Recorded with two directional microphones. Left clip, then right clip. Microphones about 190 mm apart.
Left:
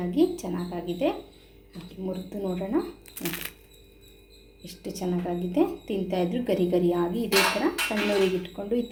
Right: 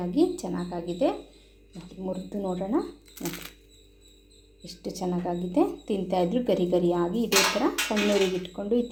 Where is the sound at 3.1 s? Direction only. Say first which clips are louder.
Left 2 dB; 5° left (ahead or behind).